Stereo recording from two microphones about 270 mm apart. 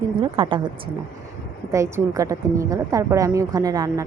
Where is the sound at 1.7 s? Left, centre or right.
Centre.